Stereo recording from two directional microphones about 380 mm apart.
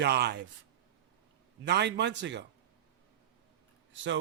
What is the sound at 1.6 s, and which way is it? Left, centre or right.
Speech, right.